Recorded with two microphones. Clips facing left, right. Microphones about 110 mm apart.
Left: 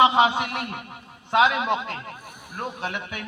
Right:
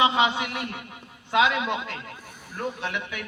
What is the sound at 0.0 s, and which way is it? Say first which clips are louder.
Speech: left 4 dB; 45° left (ahead or behind).